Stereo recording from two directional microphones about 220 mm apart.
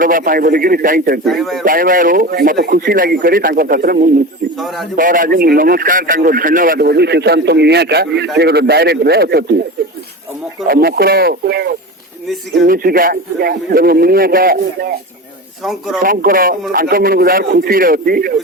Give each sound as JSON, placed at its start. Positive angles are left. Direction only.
{"t": 0.0, "sound": "a man's voice", "side_deg": -40}
{"t": 1.2, "sound": "speech", "side_deg": 0}
{"t": 1.6, "sound": "a man's voice", "side_deg": -40}
{"t": 10.7, "sound": "a man's voice", "side_deg": -45}
{"t": 16.0, "sound": "a man's voice", "side_deg": -40}